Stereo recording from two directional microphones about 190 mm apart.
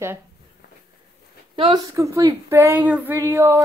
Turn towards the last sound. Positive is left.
turn(degrees=-10)  # may be behind; listen again after turning